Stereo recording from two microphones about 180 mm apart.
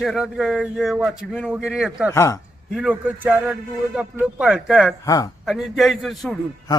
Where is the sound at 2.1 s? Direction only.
15° left (ahead or behind).